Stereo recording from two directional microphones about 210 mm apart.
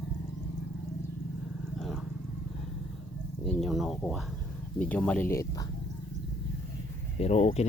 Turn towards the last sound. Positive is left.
turn(degrees=30)  # may be behind; listen again after turning